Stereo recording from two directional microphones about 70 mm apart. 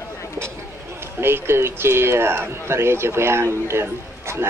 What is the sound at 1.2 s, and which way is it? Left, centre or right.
Speech, right.